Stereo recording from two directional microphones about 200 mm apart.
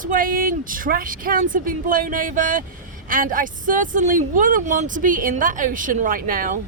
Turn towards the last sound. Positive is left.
turn(degrees=-45)  # may be behind; listen again after turning